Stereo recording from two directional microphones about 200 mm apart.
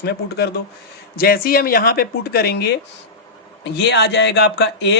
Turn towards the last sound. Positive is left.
turn(degrees=55)  # may be behind; listen again after turning